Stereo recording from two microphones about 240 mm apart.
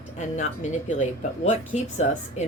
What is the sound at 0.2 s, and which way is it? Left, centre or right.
Speech, left.